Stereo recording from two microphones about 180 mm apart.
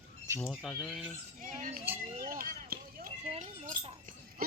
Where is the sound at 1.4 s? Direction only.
40° right (ahead or behind).